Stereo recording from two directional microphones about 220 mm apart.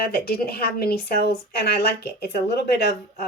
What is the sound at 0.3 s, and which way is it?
Speech, 45° left (ahead or behind).